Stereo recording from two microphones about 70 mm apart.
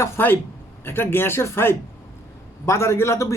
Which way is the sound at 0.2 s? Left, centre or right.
Left.